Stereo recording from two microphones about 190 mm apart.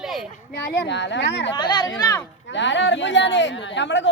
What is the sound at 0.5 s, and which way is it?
A woman's voice, 65° left (ahead or behind).